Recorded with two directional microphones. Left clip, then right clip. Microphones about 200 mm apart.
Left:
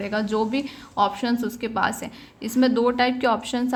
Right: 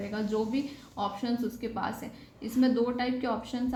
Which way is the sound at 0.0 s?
45° left (ahead or behind).